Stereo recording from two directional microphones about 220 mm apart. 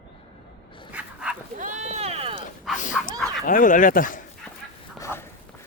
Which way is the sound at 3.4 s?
40° left (ahead or behind).